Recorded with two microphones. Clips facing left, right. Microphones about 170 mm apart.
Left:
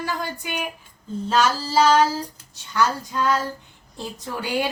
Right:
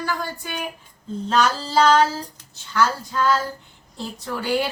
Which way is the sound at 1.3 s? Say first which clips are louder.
Even; 10° left (ahead or behind).